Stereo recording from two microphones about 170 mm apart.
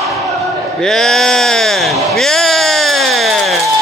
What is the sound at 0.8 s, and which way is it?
Sheep, centre (ahead or behind).